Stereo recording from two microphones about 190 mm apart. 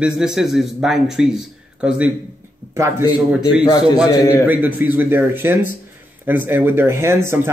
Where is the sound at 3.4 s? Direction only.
20° left (ahead or behind).